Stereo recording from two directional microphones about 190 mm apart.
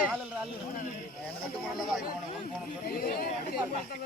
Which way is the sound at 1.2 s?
Centre (ahead or behind).